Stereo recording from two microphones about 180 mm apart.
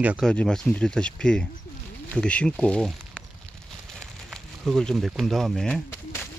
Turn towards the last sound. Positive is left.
turn(degrees=10)  # may be behind; listen again after turning